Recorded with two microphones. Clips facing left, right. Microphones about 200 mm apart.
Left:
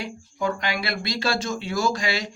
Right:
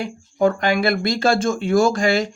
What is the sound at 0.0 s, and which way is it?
Speech, 50° right (ahead or behind).